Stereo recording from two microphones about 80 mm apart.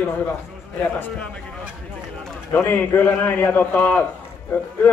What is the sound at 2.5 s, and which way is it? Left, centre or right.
A man's voice, left.